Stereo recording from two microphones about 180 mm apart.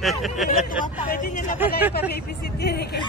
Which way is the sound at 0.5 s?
50° left (ahead or behind).